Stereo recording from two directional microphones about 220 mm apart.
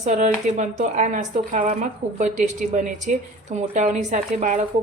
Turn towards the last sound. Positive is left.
turn(degrees=-35)  # may be behind; listen again after turning